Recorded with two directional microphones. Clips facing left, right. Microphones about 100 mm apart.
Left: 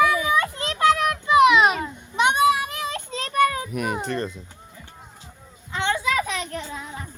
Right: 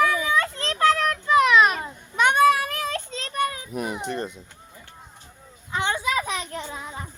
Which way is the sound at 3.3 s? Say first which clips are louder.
Left 7 dB; 40° left (ahead or behind).